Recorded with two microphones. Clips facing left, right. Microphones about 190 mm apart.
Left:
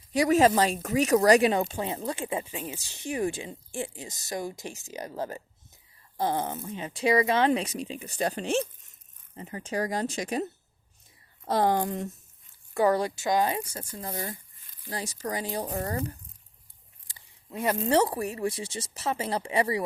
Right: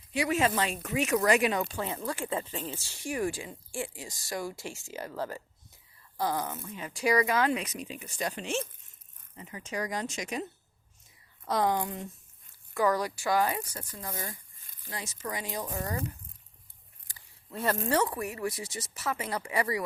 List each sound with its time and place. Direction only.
0.1 s speech: 40° left (ahead or behind)
12.7 s speech: 30° left (ahead or behind)
14.1 s speech: 45° left (ahead or behind)
14.8 s speech: 35° left (ahead or behind)
17.5 s speech: 15° left (ahead or behind)